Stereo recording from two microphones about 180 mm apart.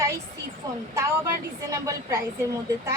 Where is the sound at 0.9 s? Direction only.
15° right (ahead or behind).